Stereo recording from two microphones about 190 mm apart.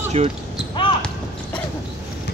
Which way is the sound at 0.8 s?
25° left (ahead or behind).